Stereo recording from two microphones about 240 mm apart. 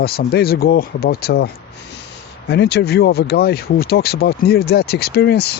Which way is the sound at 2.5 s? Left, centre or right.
Left.